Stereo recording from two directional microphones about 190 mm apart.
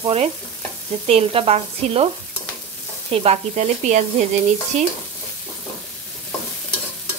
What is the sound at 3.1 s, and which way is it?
Frying, 35° right (ahead or behind).